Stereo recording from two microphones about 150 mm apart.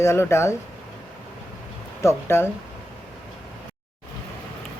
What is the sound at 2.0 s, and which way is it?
Speech, 20° left (ahead or behind).